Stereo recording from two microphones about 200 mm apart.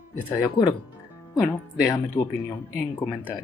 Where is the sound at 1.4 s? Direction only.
10° left (ahead or behind).